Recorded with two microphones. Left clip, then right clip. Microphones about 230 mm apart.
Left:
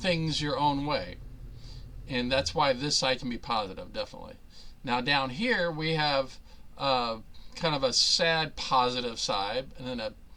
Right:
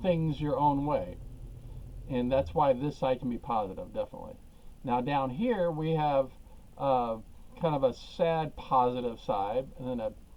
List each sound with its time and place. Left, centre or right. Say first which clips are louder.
0.0 s speech: left 1 dB; left